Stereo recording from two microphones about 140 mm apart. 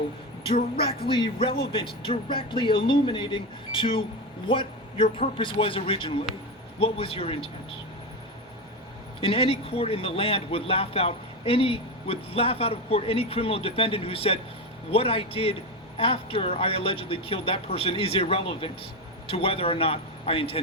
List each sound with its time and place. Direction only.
1.0 s a man's voice: 40° left (ahead or behind)
9.2 s speech: 40° left (ahead or behind)